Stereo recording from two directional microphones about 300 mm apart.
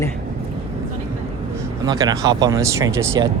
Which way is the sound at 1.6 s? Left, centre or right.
Centre.